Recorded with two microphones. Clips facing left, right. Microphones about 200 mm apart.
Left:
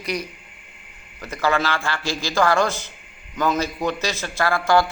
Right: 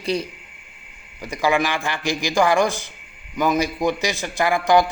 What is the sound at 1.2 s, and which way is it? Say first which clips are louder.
A man's voice: right 2 dB; 15° right (ahead or behind).